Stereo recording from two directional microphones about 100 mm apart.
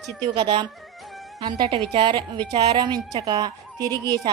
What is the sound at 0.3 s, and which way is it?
A woman's voice, 50° right (ahead or behind).